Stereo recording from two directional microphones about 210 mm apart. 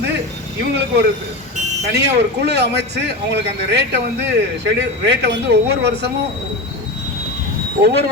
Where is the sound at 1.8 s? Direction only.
50° right (ahead or behind).